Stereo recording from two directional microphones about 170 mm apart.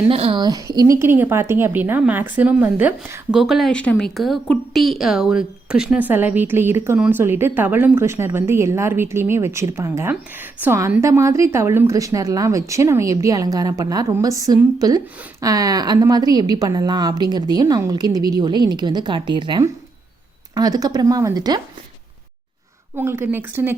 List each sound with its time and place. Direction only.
0.1 s a woman's voice: 35° right (ahead or behind)
23.0 s a woman's voice: 15° right (ahead or behind)